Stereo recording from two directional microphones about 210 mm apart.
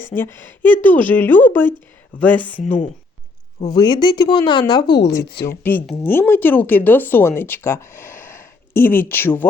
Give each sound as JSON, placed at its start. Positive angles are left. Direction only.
{"t": 0.2, "sound": "speech", "side_deg": 10}
{"t": 3.8, "sound": "speech", "side_deg": 20}
{"t": 5.6, "sound": "speech", "side_deg": 5}